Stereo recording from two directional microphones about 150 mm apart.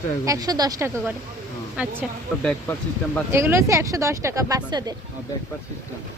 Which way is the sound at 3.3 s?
15° right (ahead or behind).